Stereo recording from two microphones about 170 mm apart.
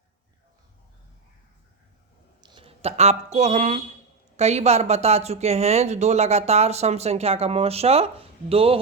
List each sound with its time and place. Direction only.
2.4 s speech: 30° right (ahead or behind)